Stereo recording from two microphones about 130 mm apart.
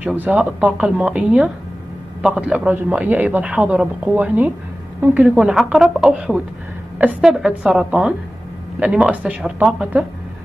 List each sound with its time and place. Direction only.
0.0 s a woman's voice: 10° right (ahead or behind)
5.4 s a woman's voice: centre (ahead or behind)